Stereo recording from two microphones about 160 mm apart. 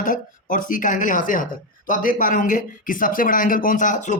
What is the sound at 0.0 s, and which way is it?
A man's voice, 55° left (ahead or behind).